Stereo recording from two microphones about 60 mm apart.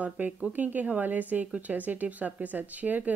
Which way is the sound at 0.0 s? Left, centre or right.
Right.